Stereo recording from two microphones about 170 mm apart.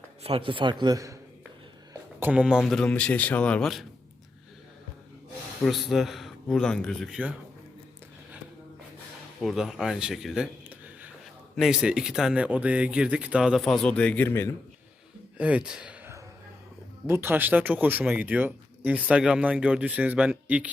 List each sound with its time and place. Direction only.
0.2 s a man's voice: 35° right (ahead or behind)
1.9 s speech: 10° right (ahead or behind)
5.6 s speech: centre (ahead or behind)
9.4 s speech: centre (ahead or behind); by 14.5 s 15° left (ahead or behind)
15.4 s speech: 10° right (ahead or behind)